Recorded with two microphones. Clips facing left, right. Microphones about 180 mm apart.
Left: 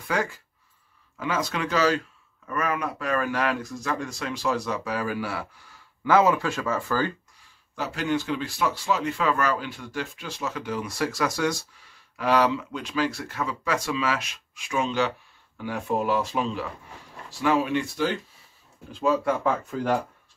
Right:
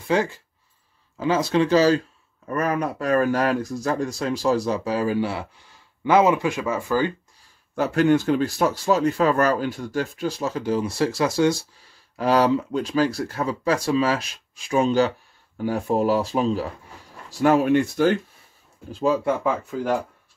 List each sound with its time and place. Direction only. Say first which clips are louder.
0.1 s speech: right 6 dB; 30° right (ahead or behind)
7.7 s speech: right 8 dB; 50° right (ahead or behind); by 16.6 s 35° right (ahead or behind)
17.4 s speech: right 6 dB; 50° right (ahead or behind)
18.9 s speech: right 2 dB; 30° right (ahead or behind)
19.4 s speech: right 1 dB; 5° right (ahead or behind)